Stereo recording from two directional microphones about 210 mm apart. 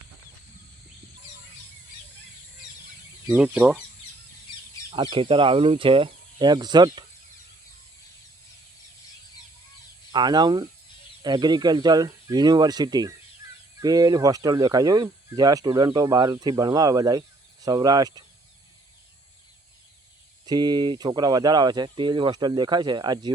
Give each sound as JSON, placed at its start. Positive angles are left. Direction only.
{"t": 3.2, "sound": "speech", "side_deg": -5}
{"t": 4.9, "sound": "speech", "side_deg": -25}
{"t": 10.1, "sound": "speech", "side_deg": -20}
{"t": 20.4, "sound": "speech", "side_deg": -20}